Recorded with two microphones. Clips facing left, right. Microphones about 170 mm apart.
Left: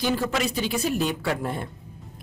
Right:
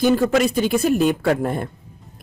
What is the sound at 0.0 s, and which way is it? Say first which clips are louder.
Speech: right 8 dB; 50° right (ahead or behind).